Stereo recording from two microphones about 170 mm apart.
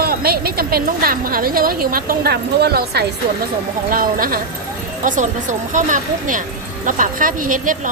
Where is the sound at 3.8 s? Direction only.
55° right (ahead or behind).